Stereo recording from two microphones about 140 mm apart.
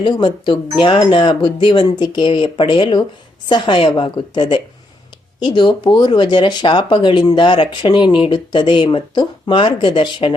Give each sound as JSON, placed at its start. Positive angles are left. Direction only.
{"t": 0.0, "sound": "speech", "side_deg": 35}